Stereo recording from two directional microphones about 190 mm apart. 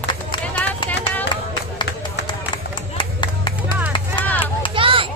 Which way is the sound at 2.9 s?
25° left (ahead or behind).